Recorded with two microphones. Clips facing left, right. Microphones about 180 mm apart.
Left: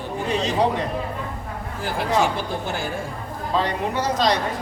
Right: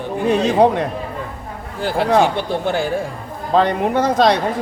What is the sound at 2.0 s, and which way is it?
Speech, 60° right (ahead or behind).